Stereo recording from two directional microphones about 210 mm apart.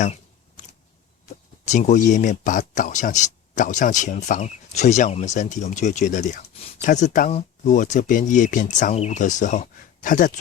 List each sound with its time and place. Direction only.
1.6 s speech: 35° left (ahead or behind)